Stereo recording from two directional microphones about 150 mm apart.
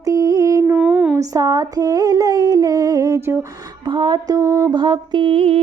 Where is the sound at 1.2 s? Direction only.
25° right (ahead or behind).